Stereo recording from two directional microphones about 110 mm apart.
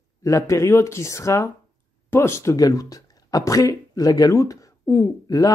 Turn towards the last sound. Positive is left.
turn(degrees=30)  # may be behind; listen again after turning